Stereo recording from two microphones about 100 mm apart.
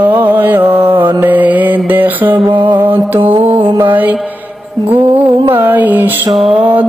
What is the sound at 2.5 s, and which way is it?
Music, 55° right (ahead or behind).